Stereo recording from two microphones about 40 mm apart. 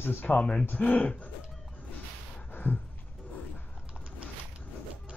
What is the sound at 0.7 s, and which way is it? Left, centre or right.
Speech, left.